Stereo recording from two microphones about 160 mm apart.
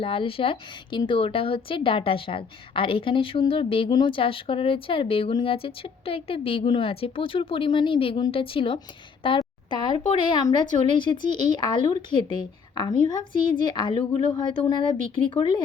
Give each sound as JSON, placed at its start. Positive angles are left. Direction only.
{"t": 0.0, "sound": "a woman's voice", "side_deg": 35}